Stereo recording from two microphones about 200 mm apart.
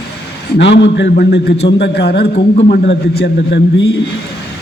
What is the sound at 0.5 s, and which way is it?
A man's voice, 60° left (ahead or behind).